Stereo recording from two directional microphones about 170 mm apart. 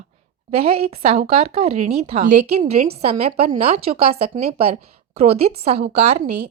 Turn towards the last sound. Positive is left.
turn(degrees=-40)  # may be behind; listen again after turning